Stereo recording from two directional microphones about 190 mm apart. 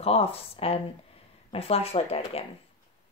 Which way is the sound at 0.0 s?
30° left (ahead or behind).